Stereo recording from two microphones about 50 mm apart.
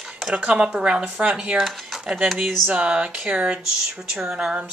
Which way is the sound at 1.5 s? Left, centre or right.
Centre.